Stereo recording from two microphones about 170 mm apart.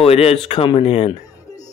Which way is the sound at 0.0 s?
35° left (ahead or behind).